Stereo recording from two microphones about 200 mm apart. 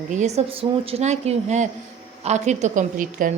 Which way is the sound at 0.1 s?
35° right (ahead or behind).